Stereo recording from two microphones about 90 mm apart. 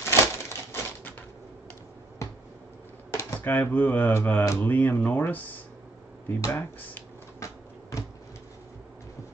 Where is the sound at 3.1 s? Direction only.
25° left (ahead or behind).